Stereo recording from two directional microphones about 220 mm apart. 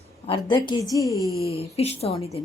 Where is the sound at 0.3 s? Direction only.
20° left (ahead or behind).